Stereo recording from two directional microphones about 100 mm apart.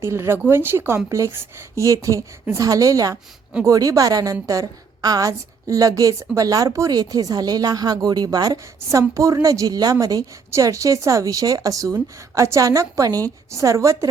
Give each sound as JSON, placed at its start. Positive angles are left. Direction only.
{"t": 0.0, "sound": "a woman's voice", "side_deg": -25}